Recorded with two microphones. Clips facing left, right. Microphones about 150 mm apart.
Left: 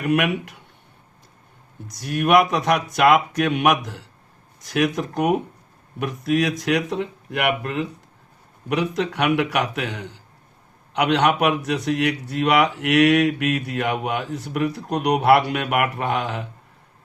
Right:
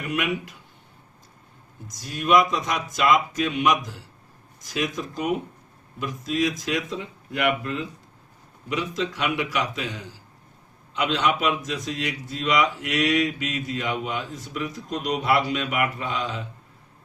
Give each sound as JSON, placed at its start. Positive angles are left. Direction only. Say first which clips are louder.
{"t": 0.0, "sound": "a man's voice", "louder": "left 6 dB", "side_deg": 60}
{"t": 1.9, "sound": "a man's voice", "louder": "left 3 dB", "side_deg": 65}